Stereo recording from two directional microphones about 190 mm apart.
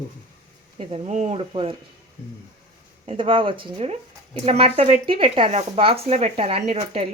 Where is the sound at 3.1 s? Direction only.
25° right (ahead or behind).